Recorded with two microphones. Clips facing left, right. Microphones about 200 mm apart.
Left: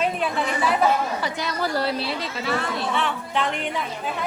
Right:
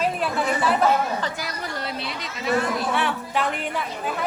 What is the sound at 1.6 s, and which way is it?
A woman's voice, 35° left (ahead or behind).